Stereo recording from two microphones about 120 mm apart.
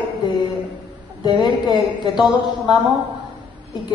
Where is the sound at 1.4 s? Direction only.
35° left (ahead or behind).